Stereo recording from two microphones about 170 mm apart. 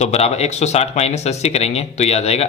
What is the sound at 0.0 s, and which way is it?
Speech, 40° left (ahead or behind).